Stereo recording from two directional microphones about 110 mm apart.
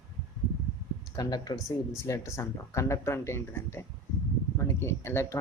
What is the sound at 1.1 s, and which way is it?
Speech, 35° left (ahead or behind).